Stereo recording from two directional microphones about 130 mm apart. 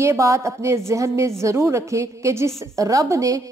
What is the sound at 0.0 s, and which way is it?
A woman's voice, 25° right (ahead or behind).